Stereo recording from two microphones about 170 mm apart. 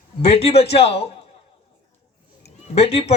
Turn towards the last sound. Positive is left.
turn(degrees=35)  # may be behind; listen again after turning